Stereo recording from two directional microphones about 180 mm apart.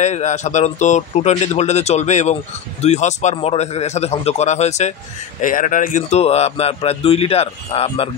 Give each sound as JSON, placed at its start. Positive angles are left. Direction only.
{"t": 0.0, "sound": "a man's voice", "side_deg": 40}
{"t": 5.4, "sound": "a man's voice", "side_deg": 50}